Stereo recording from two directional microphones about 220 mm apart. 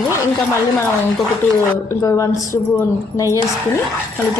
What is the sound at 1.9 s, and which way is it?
A woman's voice, 15° left (ahead or behind).